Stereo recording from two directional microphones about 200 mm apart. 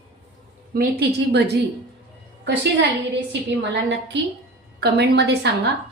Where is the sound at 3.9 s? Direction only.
60° right (ahead or behind).